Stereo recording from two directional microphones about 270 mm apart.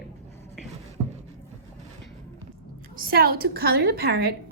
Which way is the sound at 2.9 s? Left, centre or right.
Right.